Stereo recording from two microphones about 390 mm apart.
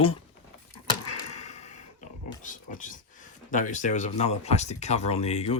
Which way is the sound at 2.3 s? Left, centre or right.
Centre.